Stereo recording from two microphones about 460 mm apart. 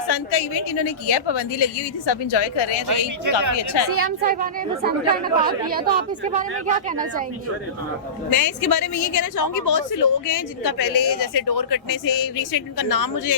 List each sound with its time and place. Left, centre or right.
0.1 s a woman's voice: left
3.3 s a woman's voice: right
3.6 s a woman's voice: left
3.9 s speech: right
8.3 s a woman's voice: left